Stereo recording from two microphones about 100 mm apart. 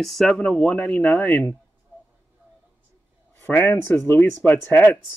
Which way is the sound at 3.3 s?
20° left (ahead or behind).